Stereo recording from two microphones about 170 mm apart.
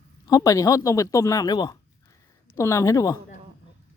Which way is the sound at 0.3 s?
20° left (ahead or behind).